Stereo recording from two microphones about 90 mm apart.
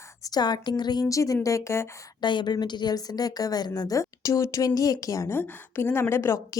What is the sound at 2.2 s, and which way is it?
A woman's voice, 55° left (ahead or behind).